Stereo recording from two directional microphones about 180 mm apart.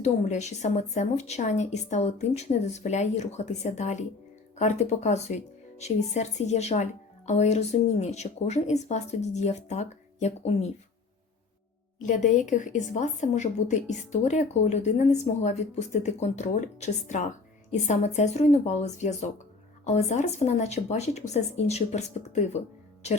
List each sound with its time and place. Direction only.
0.0 s a woman's voice: 40° left (ahead or behind)
12.0 s a woman's voice: 45° left (ahead or behind)